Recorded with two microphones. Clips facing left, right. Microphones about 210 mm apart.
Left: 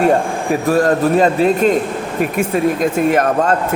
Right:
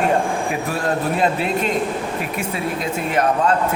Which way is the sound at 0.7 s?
40° left (ahead or behind).